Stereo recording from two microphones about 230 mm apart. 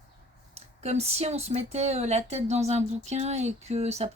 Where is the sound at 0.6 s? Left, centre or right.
Right.